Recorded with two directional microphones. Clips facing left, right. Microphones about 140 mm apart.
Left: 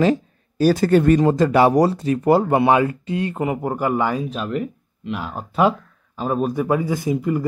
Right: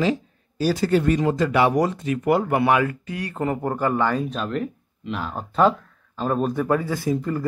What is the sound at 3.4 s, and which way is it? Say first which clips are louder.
Speech: right 3 dB; 10° left (ahead or behind).